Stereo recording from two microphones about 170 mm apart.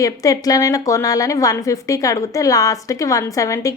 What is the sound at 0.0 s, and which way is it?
A woman's voice, 20° left (ahead or behind).